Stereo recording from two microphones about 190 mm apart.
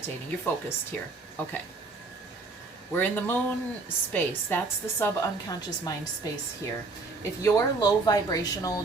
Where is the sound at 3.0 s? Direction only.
10° left (ahead or behind).